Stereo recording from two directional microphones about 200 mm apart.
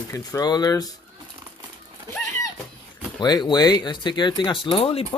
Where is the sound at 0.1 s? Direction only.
20° left (ahead or behind).